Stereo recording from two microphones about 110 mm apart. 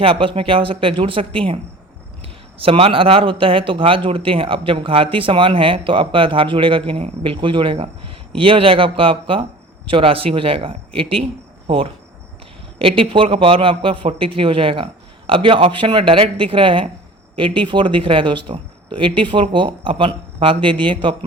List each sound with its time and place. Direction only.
0.0 s speech: 50° right (ahead or behind)